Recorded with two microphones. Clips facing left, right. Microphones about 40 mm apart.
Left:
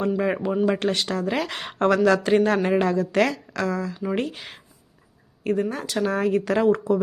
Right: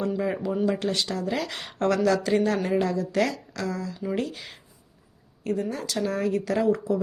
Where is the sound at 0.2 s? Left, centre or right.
Left.